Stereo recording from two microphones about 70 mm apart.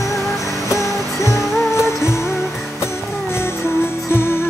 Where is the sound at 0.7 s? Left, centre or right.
Left.